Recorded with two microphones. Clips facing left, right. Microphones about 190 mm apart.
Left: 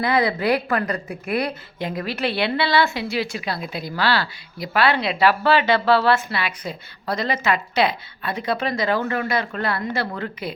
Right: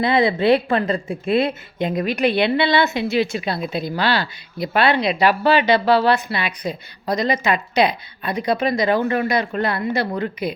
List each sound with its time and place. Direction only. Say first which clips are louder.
0.0 s a woman's voice: right 3 dB; 25° right (ahead or behind)